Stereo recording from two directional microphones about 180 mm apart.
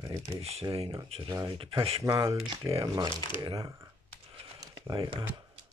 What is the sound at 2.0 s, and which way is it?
Speech, 15° right (ahead or behind).